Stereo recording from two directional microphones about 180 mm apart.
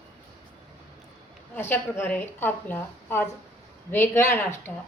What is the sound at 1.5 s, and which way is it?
A woman's voice, 10° left (ahead or behind).